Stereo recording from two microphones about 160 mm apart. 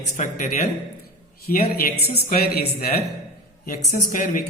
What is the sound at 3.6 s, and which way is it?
Speech, 60° left (ahead or behind).